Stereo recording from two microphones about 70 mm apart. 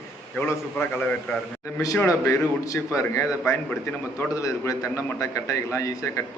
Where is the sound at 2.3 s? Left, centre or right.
Left.